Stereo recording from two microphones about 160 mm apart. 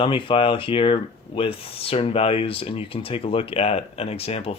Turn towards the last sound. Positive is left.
turn(degrees=40)  # may be behind; listen again after turning